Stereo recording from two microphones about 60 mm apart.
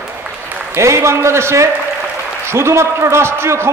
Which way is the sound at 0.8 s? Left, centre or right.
Right.